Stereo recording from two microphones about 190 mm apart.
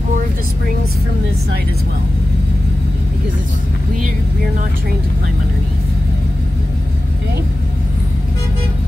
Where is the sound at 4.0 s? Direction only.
40° right (ahead or behind).